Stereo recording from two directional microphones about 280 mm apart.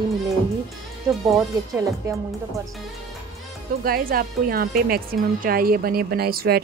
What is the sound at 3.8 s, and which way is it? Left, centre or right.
A woman's voice, right.